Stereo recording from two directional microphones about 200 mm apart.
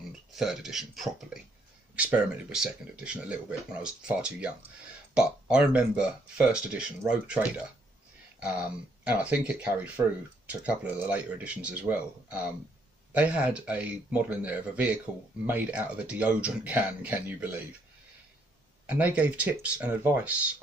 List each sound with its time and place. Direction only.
0.4 s speech: centre (ahead or behind)
18.9 s speech: 5° right (ahead or behind)